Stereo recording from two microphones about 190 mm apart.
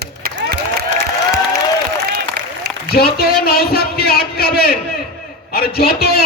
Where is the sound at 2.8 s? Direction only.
55° left (ahead or behind).